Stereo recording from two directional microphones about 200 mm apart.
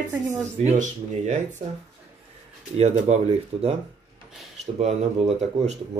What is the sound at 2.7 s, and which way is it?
Speech, 30° right (ahead or behind).